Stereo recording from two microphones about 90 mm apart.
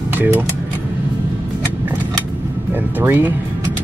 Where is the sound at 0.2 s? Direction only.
20° right (ahead or behind).